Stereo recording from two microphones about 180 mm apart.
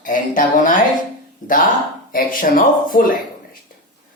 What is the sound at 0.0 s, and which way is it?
Speech, 50° left (ahead or behind).